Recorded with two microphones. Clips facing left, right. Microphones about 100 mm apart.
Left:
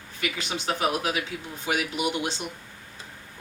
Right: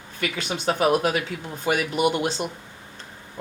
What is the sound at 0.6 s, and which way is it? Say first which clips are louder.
Speech: right 6 dB; 45° right (ahead or behind).